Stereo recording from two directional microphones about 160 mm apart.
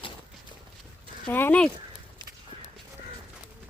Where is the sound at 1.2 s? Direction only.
10° left (ahead or behind).